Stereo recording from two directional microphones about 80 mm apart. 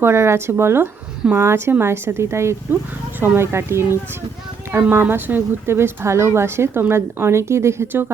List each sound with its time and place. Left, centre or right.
0.0 s a woman's voice: right